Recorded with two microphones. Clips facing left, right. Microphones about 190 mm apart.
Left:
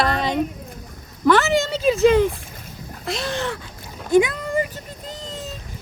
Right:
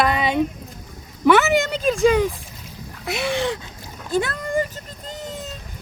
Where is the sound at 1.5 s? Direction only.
Centre (ahead or behind).